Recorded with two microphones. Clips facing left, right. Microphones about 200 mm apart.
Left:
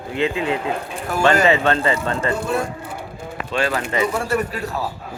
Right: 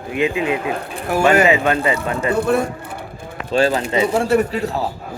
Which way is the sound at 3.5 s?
30° right (ahead or behind).